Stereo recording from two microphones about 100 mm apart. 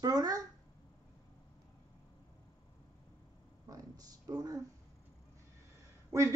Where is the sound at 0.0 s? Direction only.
35° right (ahead or behind).